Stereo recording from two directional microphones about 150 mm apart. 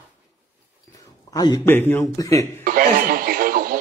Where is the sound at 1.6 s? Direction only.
15° left (ahead or behind).